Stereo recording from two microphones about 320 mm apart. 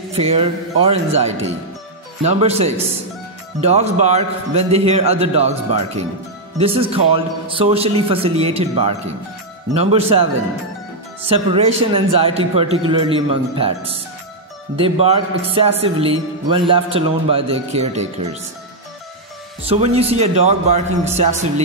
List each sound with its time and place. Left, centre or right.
0.1 s a man's voice: centre
11.2 s a man's voice: centre
19.7 s a man's voice: centre